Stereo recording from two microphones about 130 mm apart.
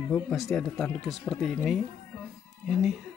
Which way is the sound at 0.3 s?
Centre (ahead or behind).